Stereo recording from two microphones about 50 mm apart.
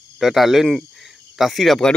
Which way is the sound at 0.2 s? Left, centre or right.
Centre.